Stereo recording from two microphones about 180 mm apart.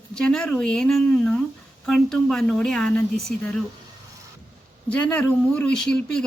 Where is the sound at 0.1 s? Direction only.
5° left (ahead or behind).